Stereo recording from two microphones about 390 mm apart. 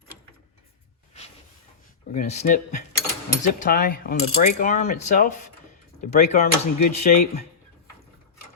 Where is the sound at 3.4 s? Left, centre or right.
Left.